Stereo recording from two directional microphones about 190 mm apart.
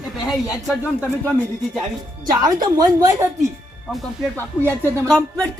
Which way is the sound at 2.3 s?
20° right (ahead or behind).